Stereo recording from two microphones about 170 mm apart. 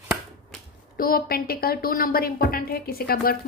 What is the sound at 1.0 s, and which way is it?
Speech, 60° left (ahead or behind).